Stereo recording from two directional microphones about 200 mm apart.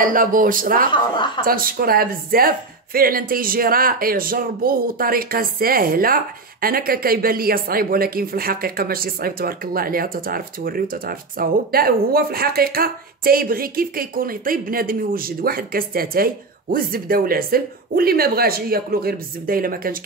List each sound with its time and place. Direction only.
0.0 s speech: 45° right (ahead or behind)
0.9 s a woman's voice: 25° left (ahead or behind)
1.4 s speech: 45° right (ahead or behind)